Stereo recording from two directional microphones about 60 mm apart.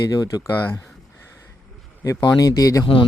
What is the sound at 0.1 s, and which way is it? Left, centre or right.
Speech, left.